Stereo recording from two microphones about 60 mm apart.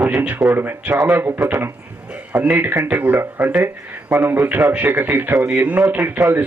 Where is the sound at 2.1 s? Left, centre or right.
Right.